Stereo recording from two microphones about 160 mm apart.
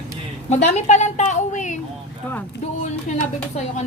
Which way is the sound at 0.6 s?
45° left (ahead or behind).